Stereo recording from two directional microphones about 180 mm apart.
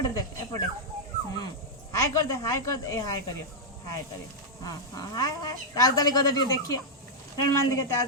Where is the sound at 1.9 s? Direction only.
15° left (ahead or behind).